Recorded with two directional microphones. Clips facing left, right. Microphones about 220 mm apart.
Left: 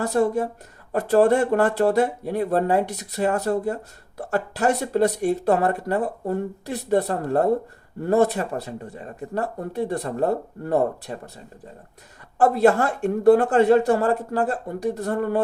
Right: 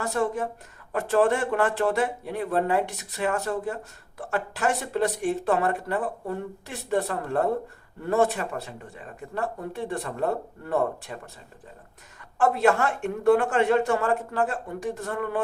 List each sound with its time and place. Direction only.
0.0 s speech: 35° left (ahead or behind)
12.4 s speech: 35° left (ahead or behind)